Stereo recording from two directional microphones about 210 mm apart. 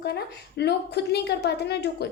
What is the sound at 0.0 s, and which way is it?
A woman's voice, 50° left (ahead or behind).